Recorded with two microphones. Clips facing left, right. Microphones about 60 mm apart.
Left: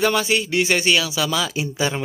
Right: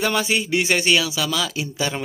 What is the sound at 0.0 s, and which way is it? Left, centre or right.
A man's voice, centre.